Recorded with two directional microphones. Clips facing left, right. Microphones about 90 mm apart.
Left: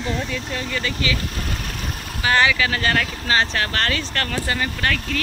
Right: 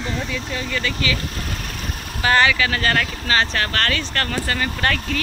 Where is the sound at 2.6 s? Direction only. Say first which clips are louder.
Right 1 dB; 20° left (ahead or behind).